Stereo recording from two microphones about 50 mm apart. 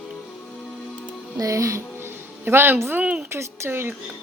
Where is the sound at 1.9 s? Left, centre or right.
Right.